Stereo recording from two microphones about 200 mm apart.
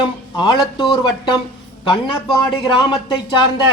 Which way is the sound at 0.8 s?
25° left (ahead or behind).